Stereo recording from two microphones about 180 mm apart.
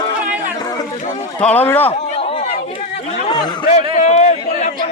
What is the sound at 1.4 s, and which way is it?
Speech, 10° left (ahead or behind).